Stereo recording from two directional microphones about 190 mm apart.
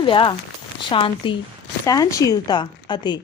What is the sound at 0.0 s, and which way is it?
A woman's voice, 25° left (ahead or behind).